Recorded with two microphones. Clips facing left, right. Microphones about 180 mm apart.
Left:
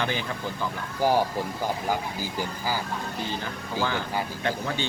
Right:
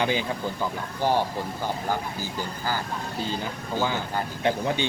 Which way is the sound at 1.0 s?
10° left (ahead or behind).